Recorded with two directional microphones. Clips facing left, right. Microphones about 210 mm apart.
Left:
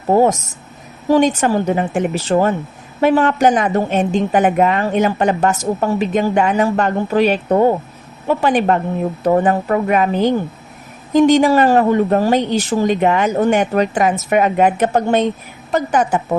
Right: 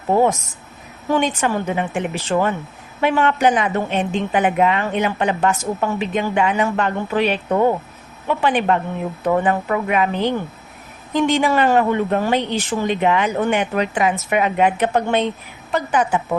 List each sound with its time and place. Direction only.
0.1 s a woman's voice: 40° left (ahead or behind)